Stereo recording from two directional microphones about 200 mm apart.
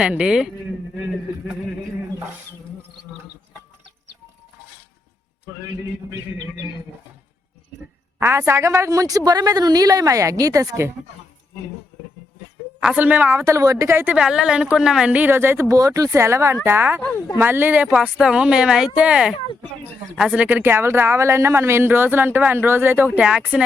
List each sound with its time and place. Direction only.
0.0 s speech: 5° right (ahead or behind)
8.2 s a woman's voice: 15° right (ahead or behind)
12.8 s a woman's voice: 5° right (ahead or behind)